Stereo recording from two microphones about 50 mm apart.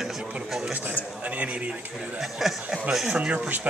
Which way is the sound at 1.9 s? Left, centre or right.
Centre.